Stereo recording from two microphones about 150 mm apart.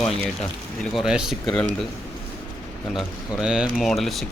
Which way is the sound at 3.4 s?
5° right (ahead or behind).